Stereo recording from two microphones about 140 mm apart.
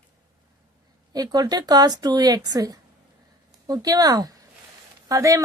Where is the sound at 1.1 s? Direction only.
30° right (ahead or behind).